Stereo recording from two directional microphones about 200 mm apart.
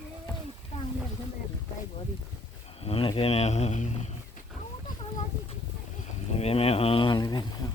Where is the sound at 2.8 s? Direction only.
30° left (ahead or behind).